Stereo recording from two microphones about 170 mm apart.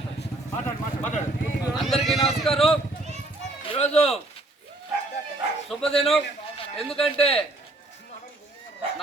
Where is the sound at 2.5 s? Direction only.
35° left (ahead or behind).